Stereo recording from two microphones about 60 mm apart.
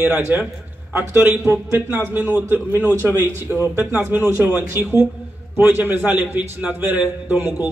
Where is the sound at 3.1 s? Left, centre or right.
Right.